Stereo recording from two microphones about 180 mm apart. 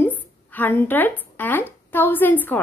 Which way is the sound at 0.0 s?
10° left (ahead or behind).